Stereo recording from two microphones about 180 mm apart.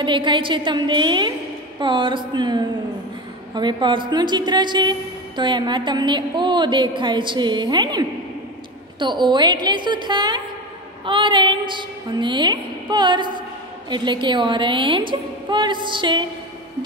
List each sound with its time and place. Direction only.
0.0 s a woman's voice: 25° right (ahead or behind)